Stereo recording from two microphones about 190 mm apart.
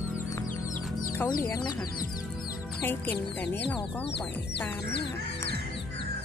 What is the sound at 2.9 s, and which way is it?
Speech, 10° left (ahead or behind).